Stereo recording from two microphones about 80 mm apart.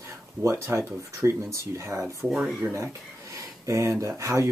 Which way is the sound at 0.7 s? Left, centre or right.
Right.